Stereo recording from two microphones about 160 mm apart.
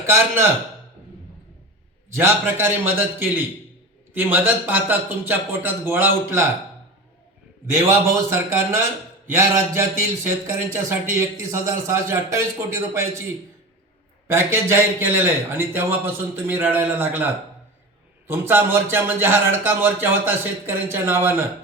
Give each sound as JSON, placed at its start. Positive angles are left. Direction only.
{"t": 0.0, "sound": "a man's voice", "side_deg": -15}
{"t": 2.0, "sound": "a man's voice", "side_deg": -15}
{"t": 7.7, "sound": "a man's voice", "side_deg": -15}
{"t": 14.3, "sound": "a man's voice", "side_deg": -15}